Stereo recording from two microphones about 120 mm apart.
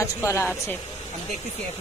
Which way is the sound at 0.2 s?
20° left (ahead or behind).